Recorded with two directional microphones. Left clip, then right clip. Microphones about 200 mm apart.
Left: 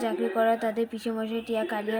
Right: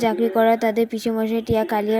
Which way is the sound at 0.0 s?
30° right (ahead or behind).